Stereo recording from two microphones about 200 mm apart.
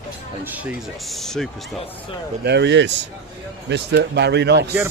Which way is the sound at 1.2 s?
Centre (ahead or behind).